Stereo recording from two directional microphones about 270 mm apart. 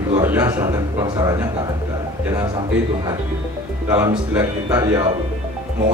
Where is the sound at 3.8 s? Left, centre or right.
Centre.